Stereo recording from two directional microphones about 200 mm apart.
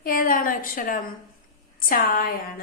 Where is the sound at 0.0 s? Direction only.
45° left (ahead or behind).